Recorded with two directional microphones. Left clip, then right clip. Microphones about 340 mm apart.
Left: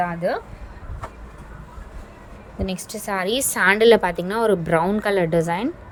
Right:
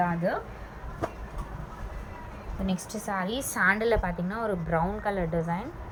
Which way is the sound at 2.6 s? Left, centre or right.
Left.